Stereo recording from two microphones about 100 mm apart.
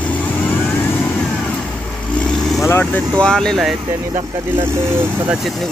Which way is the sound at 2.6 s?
25° left (ahead or behind).